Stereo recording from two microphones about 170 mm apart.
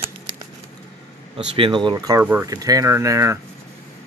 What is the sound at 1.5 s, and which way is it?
Speech, 30° right (ahead or behind).